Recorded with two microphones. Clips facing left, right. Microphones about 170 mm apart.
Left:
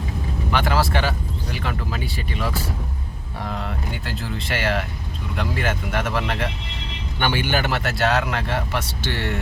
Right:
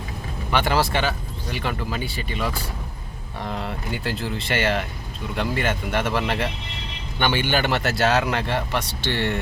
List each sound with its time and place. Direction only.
0.5 s speech: centre (ahead or behind)